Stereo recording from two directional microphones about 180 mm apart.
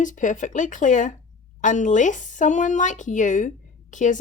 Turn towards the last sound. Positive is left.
turn(degrees=45)  # may be behind; listen again after turning